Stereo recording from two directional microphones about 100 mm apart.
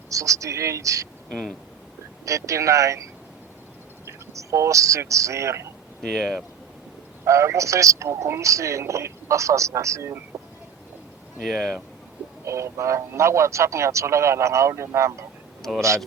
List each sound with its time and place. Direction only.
0.1 s speech: 35° right (ahead or behind)
2.2 s speech: 30° right (ahead or behind)
4.0 s speech: 30° right (ahead or behind)
6.0 s speech: 5° left (ahead or behind)
7.3 s speech: 30° right (ahead or behind)
11.4 s speech: 5° left (ahead or behind)
12.5 s a man's voice: 30° right (ahead or behind)